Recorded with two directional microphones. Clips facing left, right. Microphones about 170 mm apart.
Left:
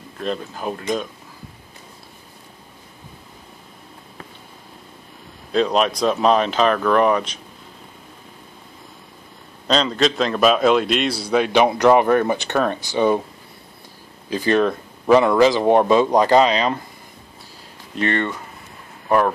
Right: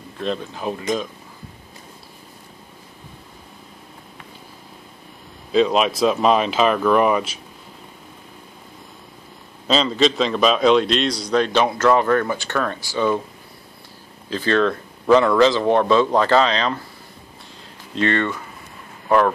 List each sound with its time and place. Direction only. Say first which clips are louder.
0.2 s speech: even; centre (ahead or behind)
5.5 s speech: right 1 dB; centre (ahead or behind)
9.7 s a man's voice: right 1 dB; centre (ahead or behind); by 13.2 s 20° left (ahead or behind)
14.3 s a man's voice: left 1 dB; 15° left (ahead or behind)
18.0 s speech: right 1 dB; 20° left (ahead or behind)